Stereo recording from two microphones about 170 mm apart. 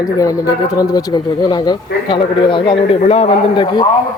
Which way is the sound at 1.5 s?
25° left (ahead or behind).